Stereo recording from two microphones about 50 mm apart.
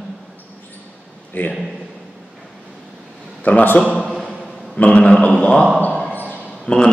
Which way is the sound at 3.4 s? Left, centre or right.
Left.